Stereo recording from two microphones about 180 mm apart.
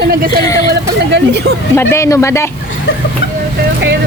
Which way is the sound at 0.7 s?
70° right (ahead or behind).